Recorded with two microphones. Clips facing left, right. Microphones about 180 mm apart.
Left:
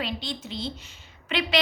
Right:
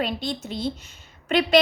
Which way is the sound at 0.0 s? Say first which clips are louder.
Right 5 dB; 45° right (ahead or behind).